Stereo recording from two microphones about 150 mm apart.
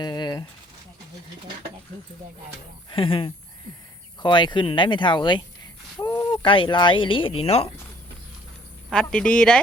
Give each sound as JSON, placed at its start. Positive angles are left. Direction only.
{"t": 0.0, "sound": "a sound", "side_deg": 30}
{"t": 2.9, "sound": "speech", "side_deg": 35}
{"t": 8.9, "sound": "speech", "side_deg": 5}